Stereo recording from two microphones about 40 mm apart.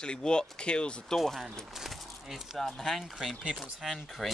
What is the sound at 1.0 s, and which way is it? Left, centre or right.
Speech, centre.